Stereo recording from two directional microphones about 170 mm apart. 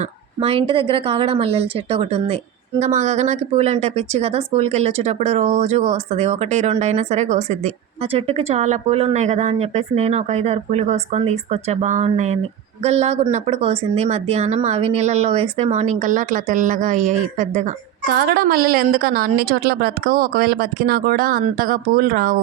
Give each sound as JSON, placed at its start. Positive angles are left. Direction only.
{"t": 0.0, "sound": "speech", "side_deg": -35}
{"t": 18.1, "sound": "a woman's voice", "side_deg": -65}